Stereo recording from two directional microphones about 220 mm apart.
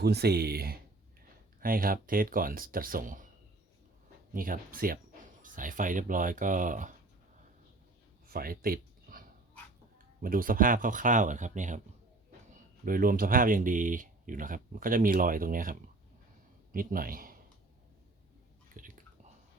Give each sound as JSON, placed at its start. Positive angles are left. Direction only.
{"t": 0.0, "sound": "speech", "side_deg": -45}
{"t": 4.4, "sound": "speech", "side_deg": -40}
{"t": 8.3, "sound": "a sound", "side_deg": -40}
{"t": 10.2, "sound": "speech", "side_deg": -40}
{"t": 12.8, "sound": "speech", "side_deg": -40}
{"t": 18.7, "sound": "whispering", "side_deg": -40}